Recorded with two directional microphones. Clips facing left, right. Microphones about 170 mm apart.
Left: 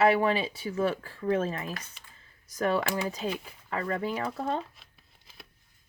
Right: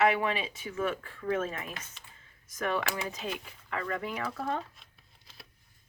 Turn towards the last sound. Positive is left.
turn(degrees=25)  # may be behind; listen again after turning